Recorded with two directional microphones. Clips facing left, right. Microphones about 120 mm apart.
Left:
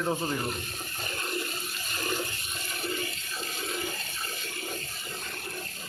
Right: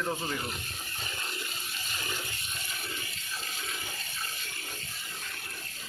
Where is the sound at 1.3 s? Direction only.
50° left (ahead or behind).